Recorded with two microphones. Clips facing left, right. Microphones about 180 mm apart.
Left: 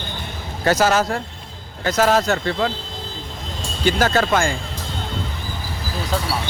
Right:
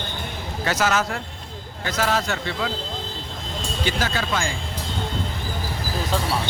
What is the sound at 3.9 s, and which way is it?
Speech, 45° left (ahead or behind).